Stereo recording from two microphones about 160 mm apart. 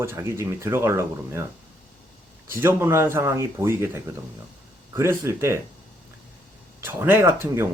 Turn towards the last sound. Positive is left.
turn(degrees=-15)  # may be behind; listen again after turning